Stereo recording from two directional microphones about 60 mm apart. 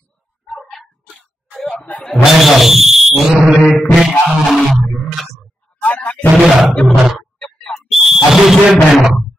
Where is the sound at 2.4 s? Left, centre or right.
Centre.